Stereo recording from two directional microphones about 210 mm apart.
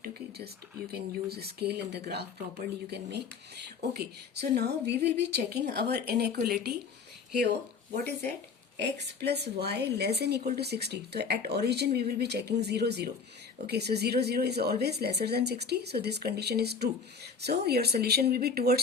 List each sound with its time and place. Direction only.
0.0 s a woman's voice: 50° right (ahead or behind)
8.8 s a woman's voice: 50° right (ahead or behind)